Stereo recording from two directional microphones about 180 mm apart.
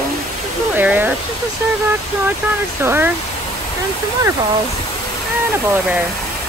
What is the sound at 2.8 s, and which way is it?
Speech, 15° right (ahead or behind).